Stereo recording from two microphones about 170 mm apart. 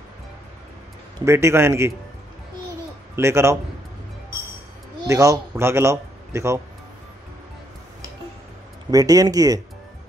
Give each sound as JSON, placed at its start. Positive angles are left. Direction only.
{"t": 1.2, "sound": "speech", "side_deg": -15}
{"t": 3.2, "sound": "speech", "side_deg": -15}
{"t": 5.0, "sound": "a man's voice", "side_deg": -20}
{"t": 8.9, "sound": "speech", "side_deg": -20}